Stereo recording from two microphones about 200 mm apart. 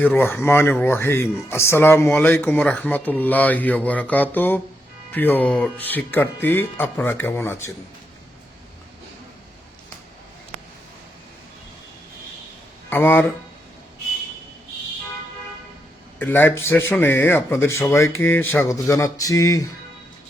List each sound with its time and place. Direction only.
0.0 s speech: 10° left (ahead or behind)
12.9 s speech: 10° left (ahead or behind)
16.1 s speech: 10° left (ahead or behind)